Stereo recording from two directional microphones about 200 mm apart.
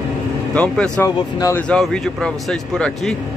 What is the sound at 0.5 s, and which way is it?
Speech, 5° left (ahead or behind).